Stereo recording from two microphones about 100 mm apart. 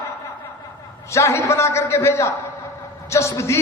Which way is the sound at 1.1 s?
30° left (ahead or behind).